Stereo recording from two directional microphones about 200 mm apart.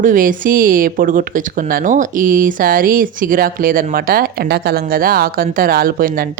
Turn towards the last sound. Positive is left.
turn(degrees=-45)  # may be behind; listen again after turning